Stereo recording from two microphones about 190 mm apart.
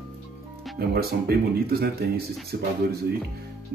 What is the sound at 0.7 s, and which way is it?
Speech, 55° right (ahead or behind).